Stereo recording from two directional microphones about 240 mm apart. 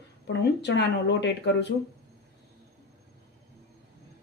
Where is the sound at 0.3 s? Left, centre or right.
Left.